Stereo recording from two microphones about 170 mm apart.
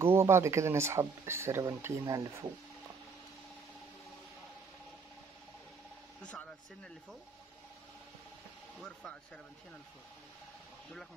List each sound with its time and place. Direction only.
0.0 s speech: 15° right (ahead or behind)
8.7 s speech: 5° left (ahead or behind)